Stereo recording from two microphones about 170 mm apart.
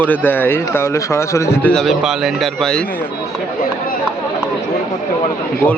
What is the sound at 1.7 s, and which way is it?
A man's voice, centre (ahead or behind).